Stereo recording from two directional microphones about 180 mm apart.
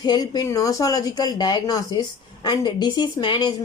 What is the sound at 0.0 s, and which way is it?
A woman's voice, 20° left (ahead or behind).